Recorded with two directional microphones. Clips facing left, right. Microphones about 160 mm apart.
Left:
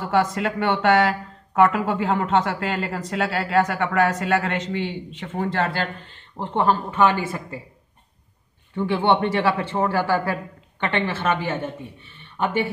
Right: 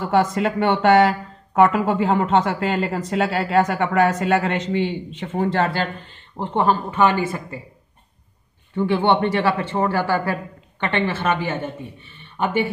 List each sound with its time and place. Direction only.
0.1 s speech: 25° right (ahead or behind)
6.3 s a man's voice: 5° right (ahead or behind)
8.7 s a man's voice: centre (ahead or behind)